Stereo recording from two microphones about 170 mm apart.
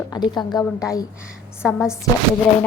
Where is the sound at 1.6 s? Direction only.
5° right (ahead or behind).